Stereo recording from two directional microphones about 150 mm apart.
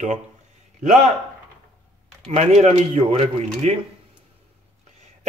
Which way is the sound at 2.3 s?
45° right (ahead or behind).